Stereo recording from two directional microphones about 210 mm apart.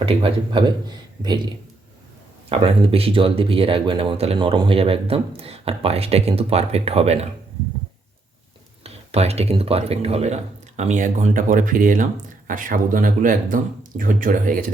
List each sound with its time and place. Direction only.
0.0 s speech: 25° right (ahead or behind)
2.5 s speech: 25° right (ahead or behind)
8.8 s speech: 30° right (ahead or behind)